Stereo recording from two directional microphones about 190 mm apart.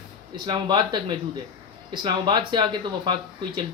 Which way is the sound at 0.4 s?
20° right (ahead or behind).